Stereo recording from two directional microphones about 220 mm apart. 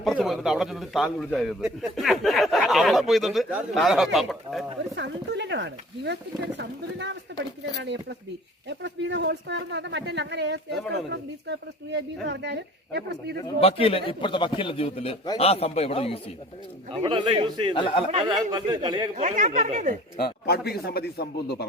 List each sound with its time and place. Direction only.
0.0 s a man's voice: centre (ahead or behind)
4.9 s speech: 50° right (ahead or behind)
8.8 s speech: 55° right (ahead or behind)
13.4 s a man's voice: 25° left (ahead or behind)
17.0 s a man's voice: 20° right (ahead or behind)
17.7 s a man's voice: 20° left (ahead or behind)
18.1 s a man's voice: 30° right (ahead or behind)
18.3 s a man's voice: 20° right (ahead or behind)
19.1 s speech: 35° right (ahead or behind)
20.2 s speech: 45° left (ahead or behind)